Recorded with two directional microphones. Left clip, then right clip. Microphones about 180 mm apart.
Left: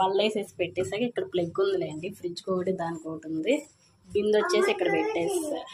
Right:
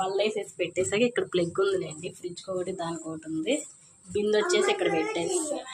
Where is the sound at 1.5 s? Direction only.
Centre (ahead or behind).